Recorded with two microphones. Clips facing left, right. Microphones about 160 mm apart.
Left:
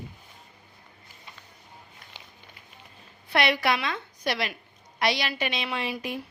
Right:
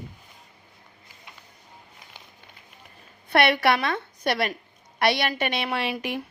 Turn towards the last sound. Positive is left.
turn(degrees=-70)  # may be behind; listen again after turning